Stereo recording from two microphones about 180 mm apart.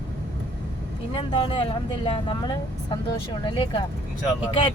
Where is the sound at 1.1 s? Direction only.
30° left (ahead or behind).